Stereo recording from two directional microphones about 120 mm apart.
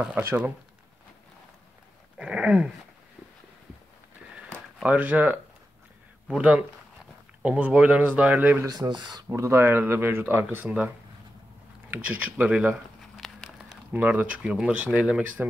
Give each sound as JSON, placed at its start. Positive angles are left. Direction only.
{"t": 0.2, "sound": "speech", "side_deg": -15}
{"t": 2.1, "sound": "dog", "side_deg": -10}
{"t": 4.8, "sound": "speech", "side_deg": -15}
{"t": 8.6, "sound": "speech", "side_deg": -35}
{"t": 11.9, "sound": "speech", "side_deg": -15}
{"t": 13.2, "sound": "a sound", "side_deg": 0}
{"t": 13.9, "sound": "speech", "side_deg": -10}